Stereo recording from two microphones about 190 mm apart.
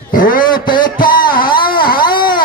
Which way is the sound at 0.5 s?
25° left (ahead or behind).